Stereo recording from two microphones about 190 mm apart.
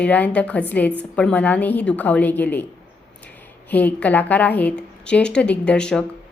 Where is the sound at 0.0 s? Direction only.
5° left (ahead or behind).